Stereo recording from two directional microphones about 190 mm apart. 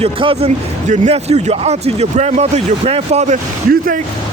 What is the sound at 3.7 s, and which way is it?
Speech, 45° right (ahead or behind).